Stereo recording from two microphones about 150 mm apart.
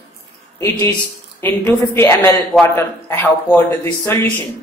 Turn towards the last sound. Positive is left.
turn(degrees=15)  # may be behind; listen again after turning